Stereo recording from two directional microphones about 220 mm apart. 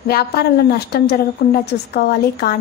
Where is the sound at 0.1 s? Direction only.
45° left (ahead or behind).